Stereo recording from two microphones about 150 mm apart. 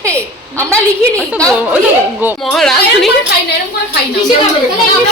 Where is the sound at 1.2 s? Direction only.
10° left (ahead or behind).